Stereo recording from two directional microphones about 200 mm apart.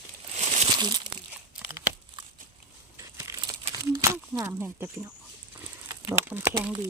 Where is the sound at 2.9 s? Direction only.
15° right (ahead or behind).